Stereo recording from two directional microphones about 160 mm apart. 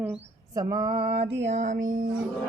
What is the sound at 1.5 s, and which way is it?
Music, 50° right (ahead or behind).